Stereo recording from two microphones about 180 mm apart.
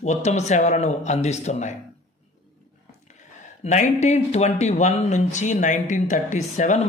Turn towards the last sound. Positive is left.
turn(degrees=40)  # may be behind; listen again after turning